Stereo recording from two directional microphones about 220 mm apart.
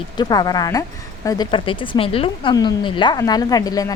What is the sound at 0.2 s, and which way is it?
A woman's voice, 15° left (ahead or behind).